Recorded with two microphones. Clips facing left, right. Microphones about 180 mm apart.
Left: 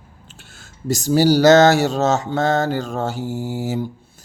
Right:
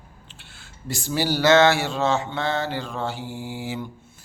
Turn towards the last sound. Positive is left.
turn(degrees=40)  # may be behind; listen again after turning